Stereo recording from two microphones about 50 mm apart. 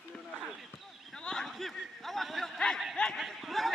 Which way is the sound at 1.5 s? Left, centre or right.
Centre.